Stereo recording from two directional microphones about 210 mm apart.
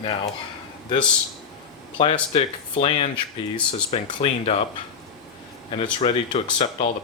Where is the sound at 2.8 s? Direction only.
25° left (ahead or behind).